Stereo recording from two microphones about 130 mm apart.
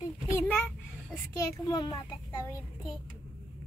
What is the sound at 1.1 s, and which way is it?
Speech, 25° left (ahead or behind).